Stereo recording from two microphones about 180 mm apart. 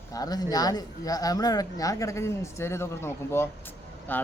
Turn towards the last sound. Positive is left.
turn(degrees=10)  # may be behind; listen again after turning